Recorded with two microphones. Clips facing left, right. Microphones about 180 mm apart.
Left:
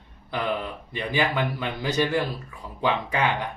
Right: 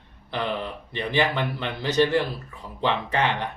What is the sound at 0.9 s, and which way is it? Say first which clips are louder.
Speech: right 1 dB; 10° left (ahead or behind).